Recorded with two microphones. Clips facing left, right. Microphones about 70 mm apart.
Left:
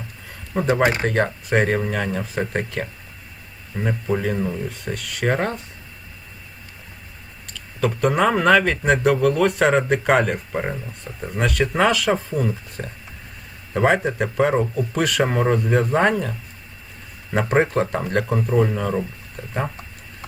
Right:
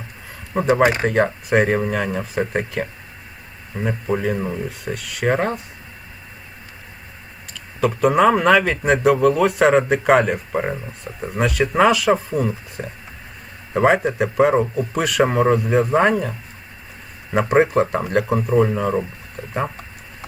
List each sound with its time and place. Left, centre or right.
0.7 s speech: right
1.0 s speech: centre
7.8 s speech: centre
17.3 s speech: centre